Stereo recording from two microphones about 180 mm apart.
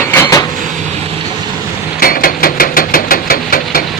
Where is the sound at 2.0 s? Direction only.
55° left (ahead or behind).